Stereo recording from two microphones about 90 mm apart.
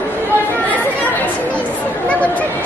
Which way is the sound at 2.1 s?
15° left (ahead or behind).